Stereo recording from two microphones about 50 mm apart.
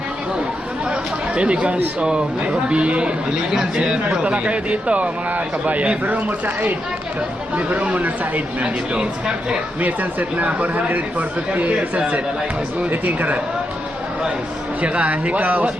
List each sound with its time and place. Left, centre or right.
0.9 s speech: right
3.5 s speech: centre; by 8.3 s right
8.6 s speech: centre
9.8 s speech: right
14.8 s speech: right